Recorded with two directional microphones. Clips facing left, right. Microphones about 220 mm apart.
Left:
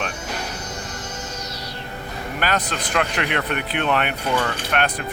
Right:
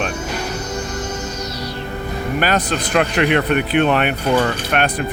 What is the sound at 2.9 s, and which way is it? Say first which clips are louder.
Speech: right 7 dB; 15° right (ahead or behind).